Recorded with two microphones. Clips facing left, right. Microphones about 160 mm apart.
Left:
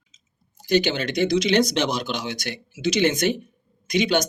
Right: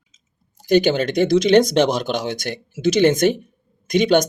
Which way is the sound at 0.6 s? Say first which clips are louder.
Right 5 dB; 50° right (ahead or behind).